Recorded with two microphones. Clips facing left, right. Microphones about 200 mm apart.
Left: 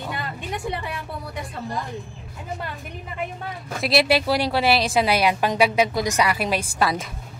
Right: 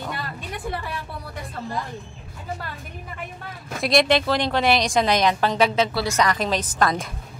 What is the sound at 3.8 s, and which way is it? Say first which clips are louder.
A woman's voice: right 1 dB; 5° left (ahead or behind).